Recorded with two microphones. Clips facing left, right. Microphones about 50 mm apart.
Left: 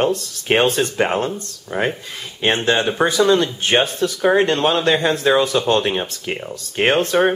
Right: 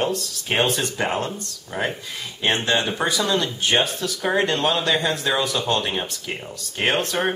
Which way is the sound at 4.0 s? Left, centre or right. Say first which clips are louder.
Left 6 dB; centre.